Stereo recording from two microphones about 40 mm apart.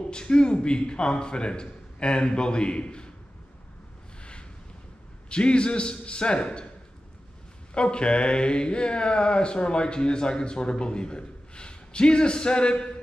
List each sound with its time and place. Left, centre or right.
0.1 s speech: left
4.2 s a sound: left
5.3 s speech: left
7.7 s speech: left